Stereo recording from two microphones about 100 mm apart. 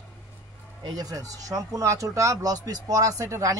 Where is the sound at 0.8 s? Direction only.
40° right (ahead or behind).